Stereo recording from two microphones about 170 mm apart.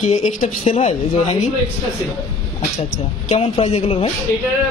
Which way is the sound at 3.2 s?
40° left (ahead or behind).